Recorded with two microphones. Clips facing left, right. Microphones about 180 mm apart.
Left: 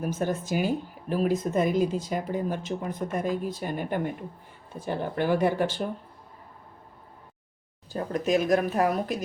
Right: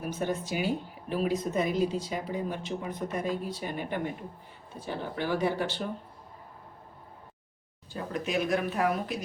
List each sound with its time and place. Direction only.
0.1 s speech: 45° left (ahead or behind)
8.1 s speech: 40° left (ahead or behind)